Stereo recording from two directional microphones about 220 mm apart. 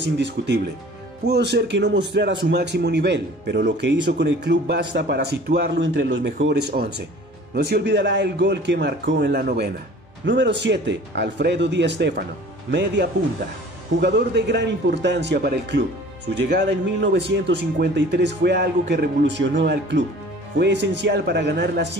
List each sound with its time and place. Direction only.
0.0 s a man's voice: 50° right (ahead or behind)